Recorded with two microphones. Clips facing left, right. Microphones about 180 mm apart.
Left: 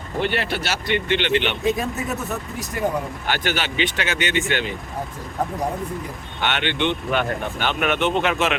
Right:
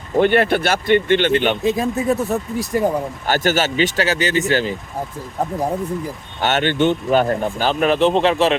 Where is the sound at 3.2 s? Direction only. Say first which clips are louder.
Right 9 dB; 40° right (ahead or behind).